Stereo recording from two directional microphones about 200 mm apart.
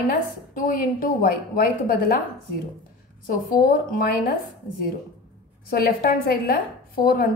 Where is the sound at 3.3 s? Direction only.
45° left (ahead or behind).